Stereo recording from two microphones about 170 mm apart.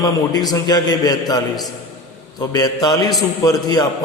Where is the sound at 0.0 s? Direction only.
20° left (ahead or behind).